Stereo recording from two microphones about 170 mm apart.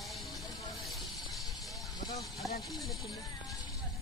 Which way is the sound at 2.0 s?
20° left (ahead or behind).